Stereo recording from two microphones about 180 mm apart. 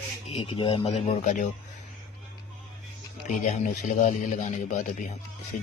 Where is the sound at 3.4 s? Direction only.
40° left (ahead or behind).